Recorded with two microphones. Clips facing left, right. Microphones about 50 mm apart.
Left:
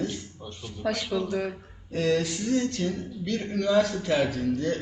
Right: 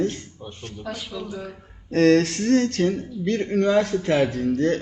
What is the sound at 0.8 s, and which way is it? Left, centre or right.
Speech, left.